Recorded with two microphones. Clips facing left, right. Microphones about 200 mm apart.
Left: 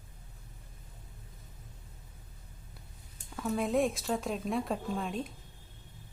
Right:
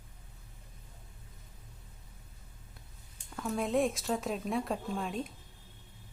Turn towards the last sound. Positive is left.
turn(degrees=0)  # may be behind; listen again after turning